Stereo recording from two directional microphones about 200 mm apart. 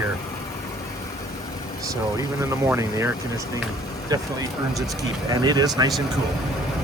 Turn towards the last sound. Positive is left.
turn(degrees=-20)  # may be behind; listen again after turning